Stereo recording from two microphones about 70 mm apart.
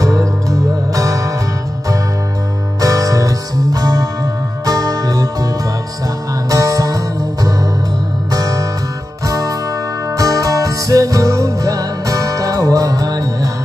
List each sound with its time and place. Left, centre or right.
0.0 s music: right
2.8 s music: right
6.5 s music: right